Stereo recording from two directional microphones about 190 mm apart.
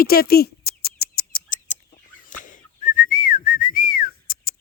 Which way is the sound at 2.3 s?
45° left (ahead or behind).